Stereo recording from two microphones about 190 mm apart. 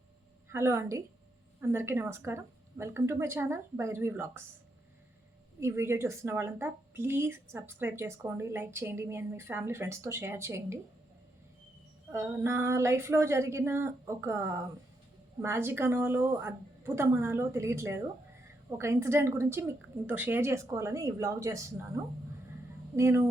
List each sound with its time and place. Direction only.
0.5 s a woman's voice: 15° right (ahead or behind)
5.5 s a woman's voice: 15° right (ahead or behind)
12.1 s a woman's voice: 15° right (ahead or behind)